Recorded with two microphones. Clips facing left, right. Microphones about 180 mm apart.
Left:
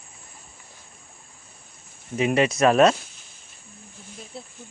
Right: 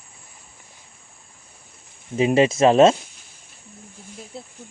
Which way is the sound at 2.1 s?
30° right (ahead or behind).